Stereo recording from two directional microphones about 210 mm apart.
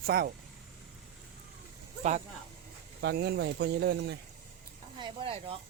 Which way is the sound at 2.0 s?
35° right (ahead or behind).